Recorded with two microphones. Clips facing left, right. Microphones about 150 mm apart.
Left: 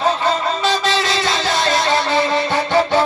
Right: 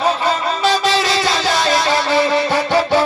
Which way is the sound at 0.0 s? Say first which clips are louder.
Even; 25° left (ahead or behind).